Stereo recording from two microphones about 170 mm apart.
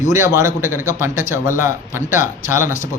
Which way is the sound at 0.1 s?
15° right (ahead or behind).